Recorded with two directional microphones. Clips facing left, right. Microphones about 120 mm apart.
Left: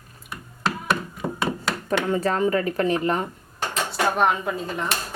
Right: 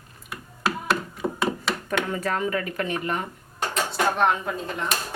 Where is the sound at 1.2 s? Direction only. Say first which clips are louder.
Right 1 dB; 5° left (ahead or behind).